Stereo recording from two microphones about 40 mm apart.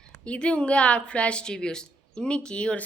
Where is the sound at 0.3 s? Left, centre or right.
Left.